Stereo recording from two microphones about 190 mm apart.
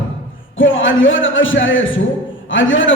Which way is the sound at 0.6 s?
90° left.